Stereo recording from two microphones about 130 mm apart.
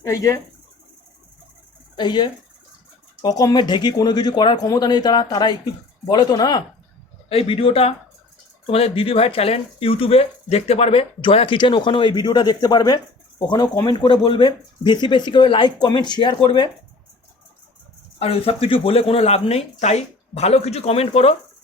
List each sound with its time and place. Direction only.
0.0 s speech: 25° left (ahead or behind)
2.0 s speech: 35° left (ahead or behind)
7.3 s speech: 45° left (ahead or behind)
18.2 s speech: 50° left (ahead or behind)